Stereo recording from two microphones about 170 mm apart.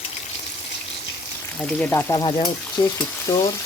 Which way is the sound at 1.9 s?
20° left (ahead or behind).